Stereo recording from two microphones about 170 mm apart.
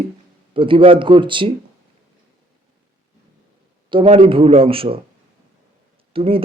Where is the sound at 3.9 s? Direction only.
30° right (ahead or behind).